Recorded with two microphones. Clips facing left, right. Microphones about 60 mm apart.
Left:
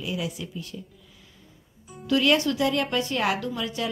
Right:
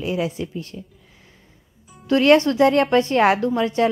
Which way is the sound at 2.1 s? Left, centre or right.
Right.